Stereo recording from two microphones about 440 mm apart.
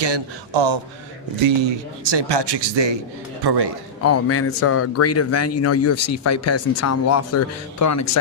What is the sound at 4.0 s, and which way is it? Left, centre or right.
A man's voice, left.